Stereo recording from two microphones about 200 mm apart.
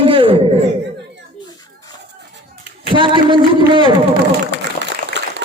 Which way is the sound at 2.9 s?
25° right (ahead or behind).